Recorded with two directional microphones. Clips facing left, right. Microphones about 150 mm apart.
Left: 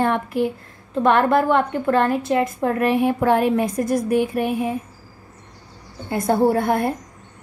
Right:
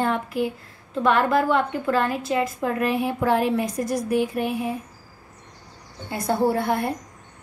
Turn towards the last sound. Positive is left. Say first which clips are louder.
# left 4 dB
turn(degrees=50)  # may be behind; listen again after turning